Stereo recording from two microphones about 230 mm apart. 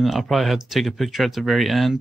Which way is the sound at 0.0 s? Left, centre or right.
Centre.